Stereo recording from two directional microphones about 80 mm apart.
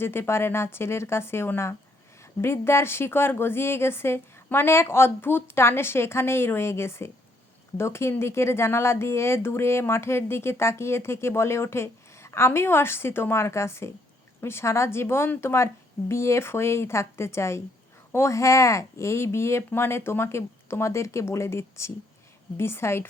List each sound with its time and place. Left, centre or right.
0.0 s speech: left